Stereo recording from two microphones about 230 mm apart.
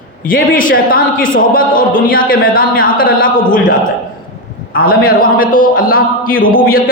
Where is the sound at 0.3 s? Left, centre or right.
Left.